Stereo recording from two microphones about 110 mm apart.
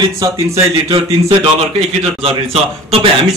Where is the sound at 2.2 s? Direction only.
65° right (ahead or behind).